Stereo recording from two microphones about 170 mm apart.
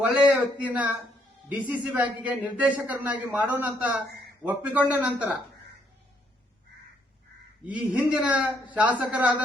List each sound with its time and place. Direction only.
0.1 s a man's voice: 5° right (ahead or behind)
7.7 s a man's voice: 5° right (ahead or behind)